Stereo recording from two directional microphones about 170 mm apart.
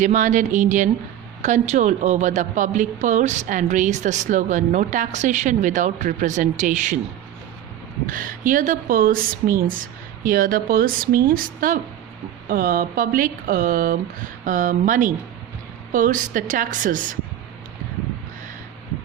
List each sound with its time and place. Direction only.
0.0 s a woman's voice: 45° right (ahead or behind)
8.0 s a woman's voice: 55° right (ahead or behind)